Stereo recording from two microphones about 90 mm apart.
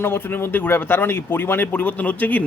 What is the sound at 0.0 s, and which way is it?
A man's voice, 25° left (ahead or behind).